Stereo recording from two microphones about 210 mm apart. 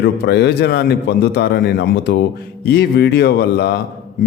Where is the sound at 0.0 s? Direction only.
55° left (ahead or behind).